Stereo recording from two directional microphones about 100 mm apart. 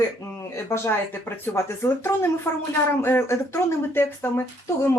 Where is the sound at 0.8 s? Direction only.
25° left (ahead or behind).